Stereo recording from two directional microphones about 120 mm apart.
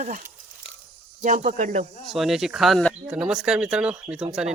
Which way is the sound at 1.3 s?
90° right.